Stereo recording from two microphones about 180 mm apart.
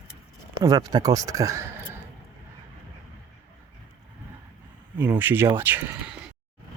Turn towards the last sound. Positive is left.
turn(degrees=-5)  # may be behind; listen again after turning